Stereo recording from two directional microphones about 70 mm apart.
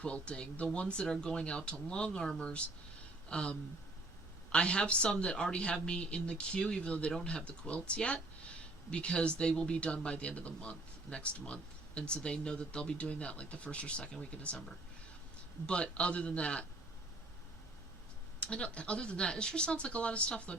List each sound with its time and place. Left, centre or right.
0.0 s speech: centre
18.3 s speech: centre